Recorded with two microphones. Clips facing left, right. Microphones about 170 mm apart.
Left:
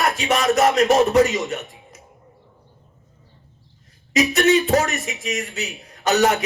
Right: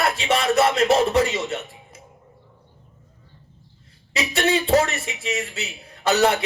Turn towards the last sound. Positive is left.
turn(degrees=-30)  # may be behind; listen again after turning